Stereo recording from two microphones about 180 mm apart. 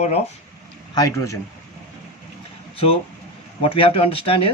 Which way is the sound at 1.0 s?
15° left (ahead or behind).